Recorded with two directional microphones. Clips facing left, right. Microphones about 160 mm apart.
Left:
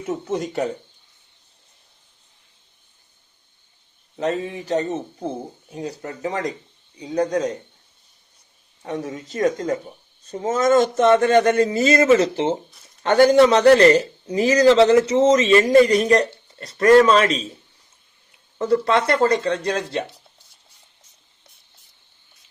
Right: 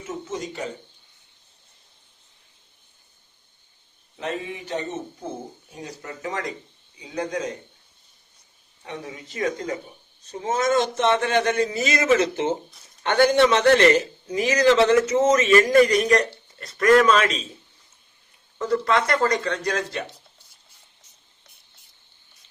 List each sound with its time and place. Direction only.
0.0 s speech: 60° left (ahead or behind)
4.2 s a man's voice: 40° left (ahead or behind)
8.8 s a man's voice: 40° left (ahead or behind)
18.6 s speech: 30° left (ahead or behind)